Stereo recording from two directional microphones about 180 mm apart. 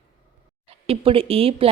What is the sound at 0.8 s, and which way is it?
Speech, 30° right (ahead or behind).